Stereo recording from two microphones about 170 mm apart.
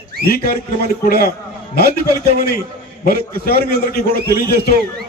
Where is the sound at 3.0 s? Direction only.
60° left (ahead or behind).